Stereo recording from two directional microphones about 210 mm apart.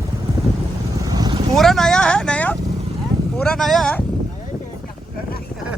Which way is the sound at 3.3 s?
5° left (ahead or behind).